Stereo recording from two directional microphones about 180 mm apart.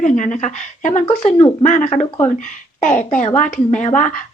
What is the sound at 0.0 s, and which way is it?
A woman's voice, 45° left (ahead or behind).